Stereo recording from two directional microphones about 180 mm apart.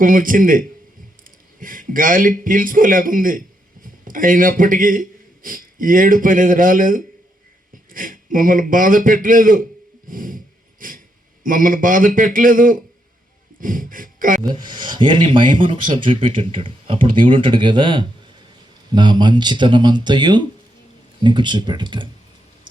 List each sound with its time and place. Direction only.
0.0 s a man's voice: 50° right (ahead or behind)
10.1 s a sound: 50° right (ahead or behind)
11.4 s a man's voice: 50° right (ahead or behind)
14.7 s speech: 25° right (ahead or behind)